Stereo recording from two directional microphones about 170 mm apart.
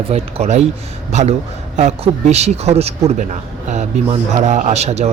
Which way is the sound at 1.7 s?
45° right (ahead or behind).